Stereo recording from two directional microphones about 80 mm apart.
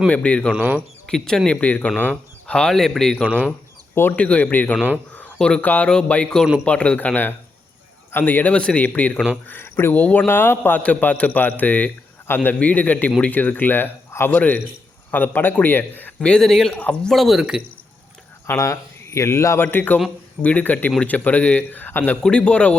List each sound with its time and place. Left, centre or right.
0.1 s speech: centre
1.5 s speech: centre
3.2 s speech: centre
4.1 s a man's voice: centre
16.2 s a man's voice: centre
16.7 s a man's voice: centre
17.1 s a man's voice: centre
18.4 s speech: left
19.6 s a man's voice: left